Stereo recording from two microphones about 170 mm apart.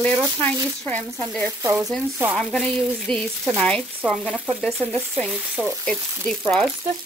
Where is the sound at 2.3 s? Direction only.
5° left (ahead or behind).